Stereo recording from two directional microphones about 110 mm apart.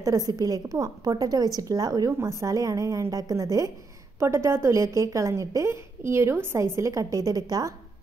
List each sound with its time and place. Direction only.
0.0 s a woman's voice: 35° right (ahead or behind)